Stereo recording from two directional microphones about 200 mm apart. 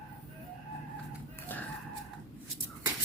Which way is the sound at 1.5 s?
10° left (ahead or behind).